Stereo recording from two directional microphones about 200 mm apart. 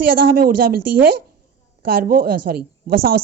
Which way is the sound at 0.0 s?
45° right (ahead or behind).